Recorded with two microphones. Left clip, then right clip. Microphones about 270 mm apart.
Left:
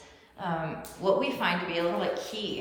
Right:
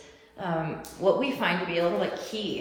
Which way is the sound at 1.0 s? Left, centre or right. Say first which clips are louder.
Right 2 dB; centre.